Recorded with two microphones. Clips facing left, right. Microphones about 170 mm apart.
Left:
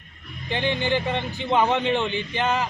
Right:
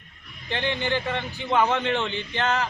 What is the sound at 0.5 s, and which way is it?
Speech, 15° left (ahead or behind).